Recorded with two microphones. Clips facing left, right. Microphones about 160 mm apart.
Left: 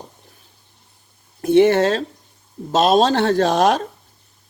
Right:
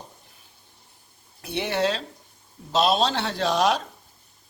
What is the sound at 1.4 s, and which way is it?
Speech, 45° left (ahead or behind).